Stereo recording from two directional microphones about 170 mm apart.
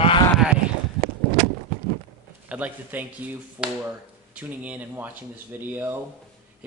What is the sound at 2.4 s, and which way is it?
Speech, 10° right (ahead or behind).